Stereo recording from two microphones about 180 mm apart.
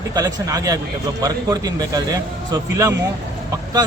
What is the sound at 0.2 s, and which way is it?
A man's voice, 20° right (ahead or behind).